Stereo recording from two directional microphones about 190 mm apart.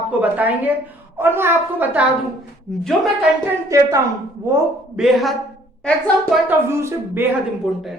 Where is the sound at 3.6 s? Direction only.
15° right (ahead or behind).